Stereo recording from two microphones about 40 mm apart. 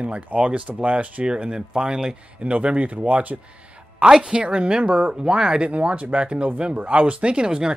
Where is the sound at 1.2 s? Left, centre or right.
Right.